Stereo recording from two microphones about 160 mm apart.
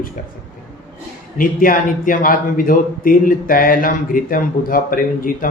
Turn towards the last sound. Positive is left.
turn(degrees=60)  # may be behind; listen again after turning